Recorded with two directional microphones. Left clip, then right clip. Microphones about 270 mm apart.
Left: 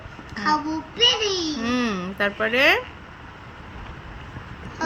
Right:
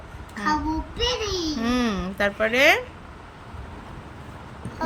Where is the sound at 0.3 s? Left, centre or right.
Centre.